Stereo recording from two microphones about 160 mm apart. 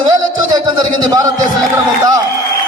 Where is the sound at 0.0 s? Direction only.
25° right (ahead or behind).